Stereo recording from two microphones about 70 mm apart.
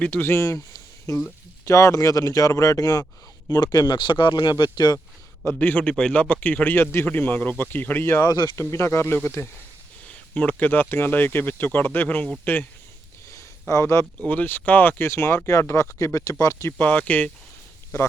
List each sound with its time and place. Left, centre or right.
0.0 s speech: left
1.1 s speech: left
3.5 s speech: left
5.5 s speech: left
8.2 s speech: left
8.5 s speech: left
13.3 s a sound: left
14.3 s speech: left
16.7 s speech: left